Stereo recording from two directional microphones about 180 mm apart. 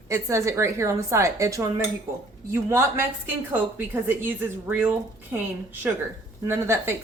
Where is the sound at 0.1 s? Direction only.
15° right (ahead or behind).